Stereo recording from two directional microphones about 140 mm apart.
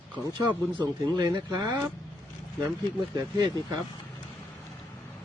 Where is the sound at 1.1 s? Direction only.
30° right (ahead or behind).